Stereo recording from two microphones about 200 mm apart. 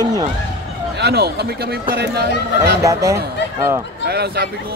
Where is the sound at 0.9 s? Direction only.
55° right (ahead or behind).